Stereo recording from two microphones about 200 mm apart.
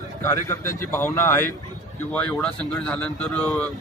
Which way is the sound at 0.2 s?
15° left (ahead or behind).